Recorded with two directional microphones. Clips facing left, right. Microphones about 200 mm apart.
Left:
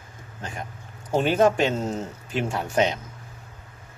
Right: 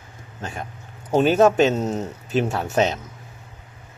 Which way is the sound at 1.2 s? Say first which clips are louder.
Right 4 dB; 25° right (ahead or behind).